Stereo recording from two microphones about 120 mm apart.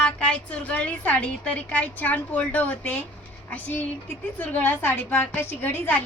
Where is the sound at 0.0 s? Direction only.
10° left (ahead or behind).